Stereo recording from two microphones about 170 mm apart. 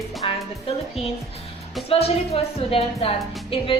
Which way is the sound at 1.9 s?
35° left (ahead or behind).